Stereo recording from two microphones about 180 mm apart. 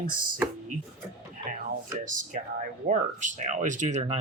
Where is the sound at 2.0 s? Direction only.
45° right (ahead or behind).